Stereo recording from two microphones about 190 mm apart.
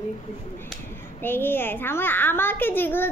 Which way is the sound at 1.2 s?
10° left (ahead or behind).